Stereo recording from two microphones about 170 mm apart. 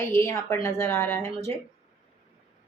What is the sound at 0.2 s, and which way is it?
A woman's voice, 15° left (ahead or behind).